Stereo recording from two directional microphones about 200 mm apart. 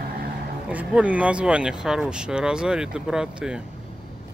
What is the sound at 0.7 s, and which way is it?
Speech, 5° right (ahead or behind).